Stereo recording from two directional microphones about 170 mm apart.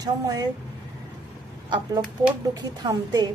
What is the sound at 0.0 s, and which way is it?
Speech, 20° right (ahead or behind).